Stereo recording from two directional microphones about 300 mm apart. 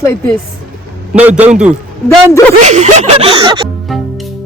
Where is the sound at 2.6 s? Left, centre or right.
Right.